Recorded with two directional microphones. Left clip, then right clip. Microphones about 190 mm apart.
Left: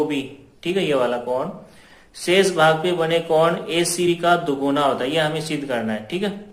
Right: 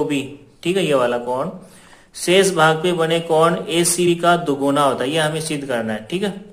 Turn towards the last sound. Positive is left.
turn(degrees=-35)  # may be behind; listen again after turning